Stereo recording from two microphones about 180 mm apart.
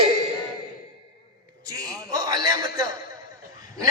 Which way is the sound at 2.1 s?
20° right (ahead or behind).